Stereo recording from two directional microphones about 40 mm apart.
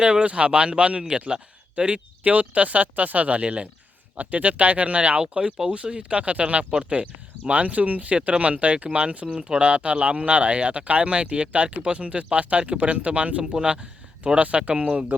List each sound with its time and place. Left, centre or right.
0.0 s speech: right
13.4 s speech: centre
14.3 s speech: right